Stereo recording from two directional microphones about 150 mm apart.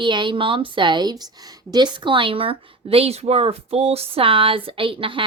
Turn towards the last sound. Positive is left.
turn(degrees=-35)  # may be behind; listen again after turning